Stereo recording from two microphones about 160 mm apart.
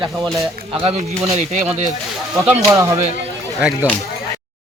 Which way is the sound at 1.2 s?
40° right (ahead or behind).